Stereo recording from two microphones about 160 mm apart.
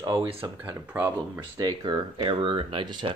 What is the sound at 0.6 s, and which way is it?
Speech, 10° right (ahead or behind).